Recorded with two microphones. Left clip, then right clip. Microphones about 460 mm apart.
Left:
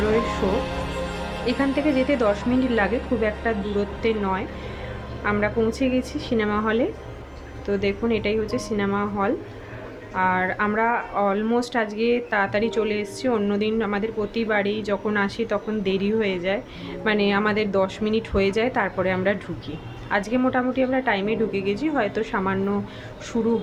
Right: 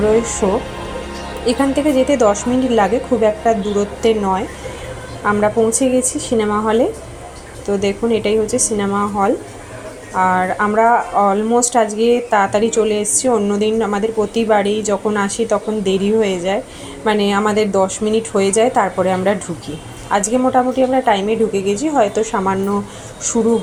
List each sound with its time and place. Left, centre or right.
1.5 s speech: left